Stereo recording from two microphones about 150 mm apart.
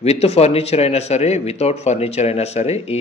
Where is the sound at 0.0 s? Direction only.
45° left (ahead or behind).